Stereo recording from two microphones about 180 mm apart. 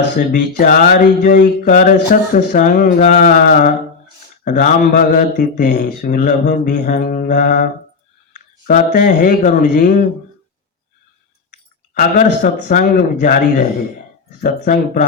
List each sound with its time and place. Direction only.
0.2 s speech: 50° left (ahead or behind)
11.9 s speech: 45° left (ahead or behind)